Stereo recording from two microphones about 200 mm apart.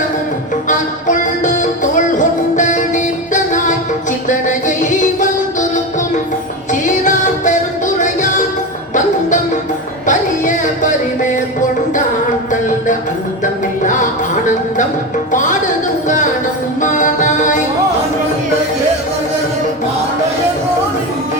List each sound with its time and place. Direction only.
0.7 s music: 40° left (ahead or behind)
6.8 s music: 40° left (ahead or behind)
10.1 s a sound: 40° left (ahead or behind)
13.4 s music: 40° left (ahead or behind)
16.0 s music: 40° left (ahead or behind)